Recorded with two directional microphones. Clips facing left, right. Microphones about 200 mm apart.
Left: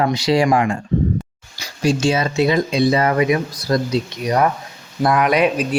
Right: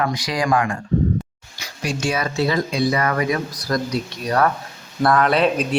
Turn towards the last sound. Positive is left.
turn(degrees=15)  # may be behind; listen again after turning